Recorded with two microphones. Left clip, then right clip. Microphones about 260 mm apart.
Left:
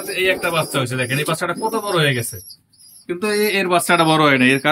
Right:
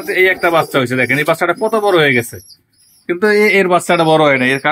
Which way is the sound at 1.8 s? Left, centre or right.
Right.